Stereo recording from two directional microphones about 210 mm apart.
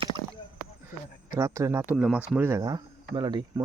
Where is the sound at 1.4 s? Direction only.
15° right (ahead or behind).